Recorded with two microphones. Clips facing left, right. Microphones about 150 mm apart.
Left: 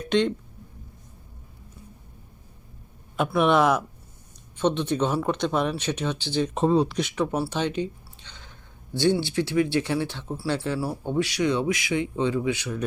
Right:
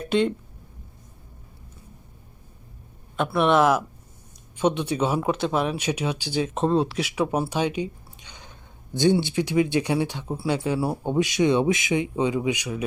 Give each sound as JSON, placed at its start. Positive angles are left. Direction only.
{"t": 0.0, "sound": "speech", "side_deg": -5}
{"t": 3.2, "sound": "speech", "side_deg": 0}
{"t": 6.5, "sound": "speech", "side_deg": 0}